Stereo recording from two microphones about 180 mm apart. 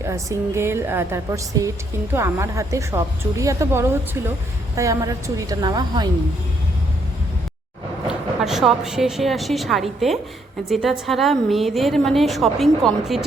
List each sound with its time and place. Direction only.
0.0 s a woman's voice: 15° right (ahead or behind)
8.0 s a woman's voice: centre (ahead or behind)